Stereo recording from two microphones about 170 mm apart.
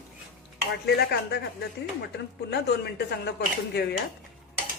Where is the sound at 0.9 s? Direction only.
80° left.